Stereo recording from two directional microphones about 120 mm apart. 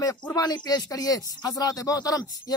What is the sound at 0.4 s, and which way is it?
A man's voice, 30° left (ahead or behind).